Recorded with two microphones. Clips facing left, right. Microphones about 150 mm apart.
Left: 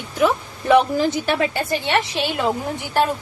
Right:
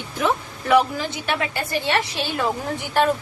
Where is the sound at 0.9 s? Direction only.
40° left (ahead or behind).